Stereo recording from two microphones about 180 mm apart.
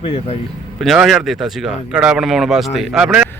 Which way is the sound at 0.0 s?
30° left (ahead or behind).